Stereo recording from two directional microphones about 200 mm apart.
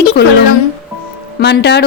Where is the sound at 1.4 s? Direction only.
55° left (ahead or behind).